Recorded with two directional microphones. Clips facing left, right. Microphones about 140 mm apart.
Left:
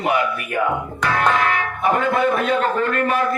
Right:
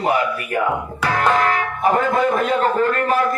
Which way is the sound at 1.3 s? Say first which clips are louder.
Right 2 dB; 40° right (ahead or behind).